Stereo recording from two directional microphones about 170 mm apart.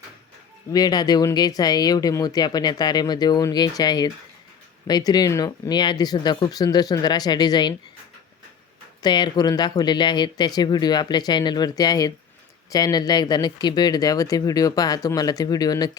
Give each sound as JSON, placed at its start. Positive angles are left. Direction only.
{"t": 0.7, "sound": "speech", "side_deg": 25}
{"t": 9.0, "sound": "speech", "side_deg": 25}